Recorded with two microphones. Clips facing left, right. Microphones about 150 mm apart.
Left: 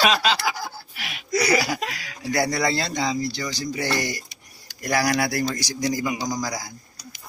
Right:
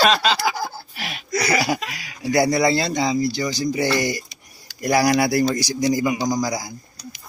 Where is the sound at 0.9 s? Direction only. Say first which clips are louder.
Right 5 dB; 35° right (ahead or behind).